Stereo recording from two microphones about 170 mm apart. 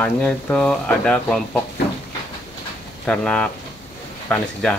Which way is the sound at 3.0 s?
5° left (ahead or behind).